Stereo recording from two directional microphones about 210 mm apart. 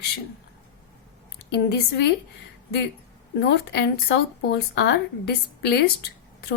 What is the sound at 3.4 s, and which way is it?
Speech, 55° left (ahead or behind).